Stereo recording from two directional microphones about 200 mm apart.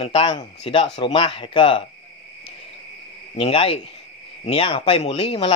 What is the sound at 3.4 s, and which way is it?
Speech, 30° left (ahead or behind).